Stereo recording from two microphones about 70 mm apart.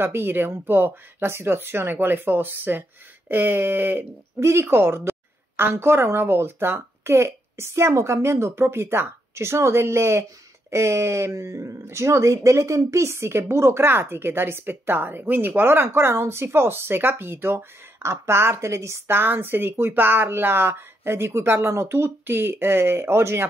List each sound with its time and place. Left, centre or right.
0.0 s speech: right
3.3 s a sound: right
4.4 s speech: right